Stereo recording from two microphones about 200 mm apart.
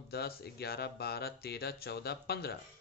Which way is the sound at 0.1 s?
55° left (ahead or behind).